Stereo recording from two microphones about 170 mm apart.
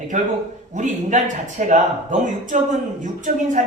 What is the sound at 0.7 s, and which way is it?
A man's voice, 50° right (ahead or behind).